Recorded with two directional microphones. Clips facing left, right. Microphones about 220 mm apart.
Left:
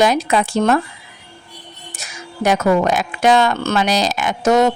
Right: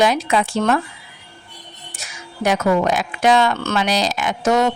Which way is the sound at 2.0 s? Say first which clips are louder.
Left 2 dB; 45° left (ahead or behind).